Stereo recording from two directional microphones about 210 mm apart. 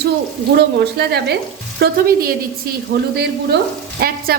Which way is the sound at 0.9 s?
50° right (ahead or behind).